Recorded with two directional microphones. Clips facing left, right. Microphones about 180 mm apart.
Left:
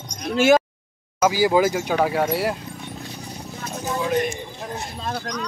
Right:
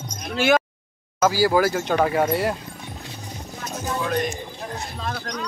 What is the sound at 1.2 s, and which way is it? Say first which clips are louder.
Speech: left 1 dB; 15° left (ahead or behind).